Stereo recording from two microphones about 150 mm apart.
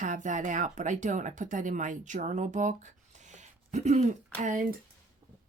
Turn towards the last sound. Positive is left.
turn(degrees=-60)  # may be behind; listen again after turning